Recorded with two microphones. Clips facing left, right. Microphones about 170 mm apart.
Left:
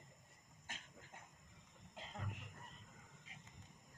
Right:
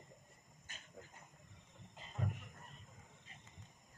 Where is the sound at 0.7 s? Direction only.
90° left.